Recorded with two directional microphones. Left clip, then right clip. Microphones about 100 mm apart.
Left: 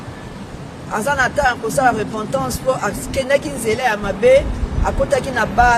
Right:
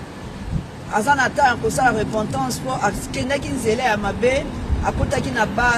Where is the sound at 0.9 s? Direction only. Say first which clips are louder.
Even; 40° left (ahead or behind).